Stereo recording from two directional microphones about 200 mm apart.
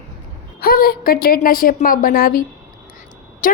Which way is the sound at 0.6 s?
45° left (ahead or behind).